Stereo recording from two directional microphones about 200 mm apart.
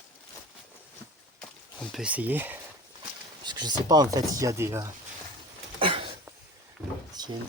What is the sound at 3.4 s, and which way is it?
Speech, 20° right (ahead or behind).